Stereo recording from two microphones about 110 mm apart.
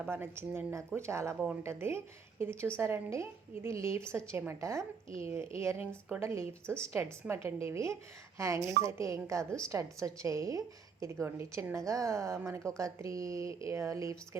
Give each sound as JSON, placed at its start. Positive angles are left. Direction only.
{"t": 0.1, "sound": "a woman's voice", "side_deg": -20}
{"t": 6.7, "sound": "a woman's voice", "side_deg": 10}
{"t": 6.9, "sound": "a woman's voice", "side_deg": -25}